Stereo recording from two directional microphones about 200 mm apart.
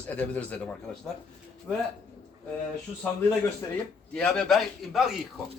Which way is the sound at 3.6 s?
15° left (ahead or behind).